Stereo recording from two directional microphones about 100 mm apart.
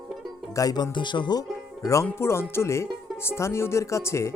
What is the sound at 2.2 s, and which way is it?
Speech, 25° left (ahead or behind).